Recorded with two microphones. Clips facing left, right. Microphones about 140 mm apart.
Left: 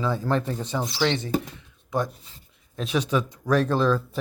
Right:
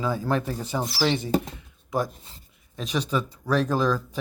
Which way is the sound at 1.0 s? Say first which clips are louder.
Even; 15° right (ahead or behind).